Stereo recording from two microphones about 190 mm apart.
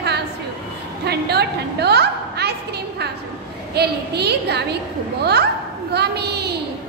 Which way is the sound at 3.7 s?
60° right (ahead or behind).